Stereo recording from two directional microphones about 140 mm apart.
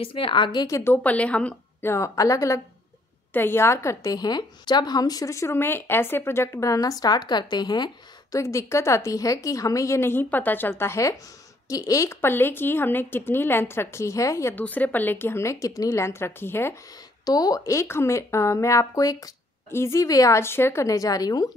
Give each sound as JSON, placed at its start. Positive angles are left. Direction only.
{"t": 0.0, "sound": "a woman's voice", "side_deg": 40}
{"t": 1.0, "sound": "a woman's voice", "side_deg": 10}
{"t": 17.2, "sound": "a woman's voice", "side_deg": 25}